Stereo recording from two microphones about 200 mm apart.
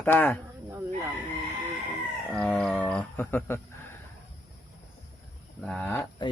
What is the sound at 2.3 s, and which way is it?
Livestock, 5° left (ahead or behind).